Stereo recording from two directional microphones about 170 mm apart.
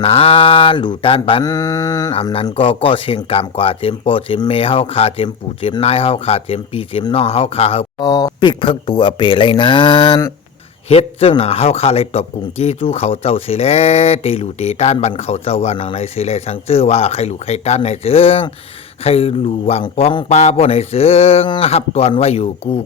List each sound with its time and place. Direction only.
0.0 s mantra: 35° left (ahead or behind)
2.1 s speech: 35° left (ahead or behind)
10.8 s speech: 35° left (ahead or behind)